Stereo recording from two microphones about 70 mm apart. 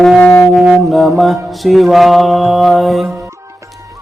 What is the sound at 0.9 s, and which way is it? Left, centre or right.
Mantra, centre.